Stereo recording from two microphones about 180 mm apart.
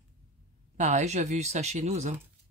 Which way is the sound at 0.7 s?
40° right (ahead or behind).